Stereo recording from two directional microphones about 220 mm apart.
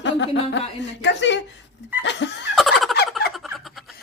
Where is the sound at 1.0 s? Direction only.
55° left (ahead or behind).